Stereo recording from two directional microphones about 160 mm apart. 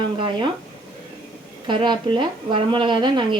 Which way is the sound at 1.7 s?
30° right (ahead or behind).